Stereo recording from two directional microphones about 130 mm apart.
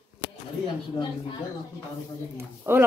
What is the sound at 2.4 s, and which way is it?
Speech, 15° right (ahead or behind).